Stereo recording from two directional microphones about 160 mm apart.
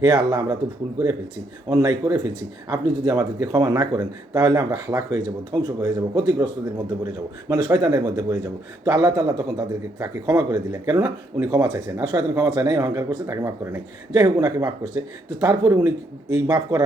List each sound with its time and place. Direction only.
0.0 s a man's voice: 25° right (ahead or behind)
1.7 s a man's voice: 25° right (ahead or behind)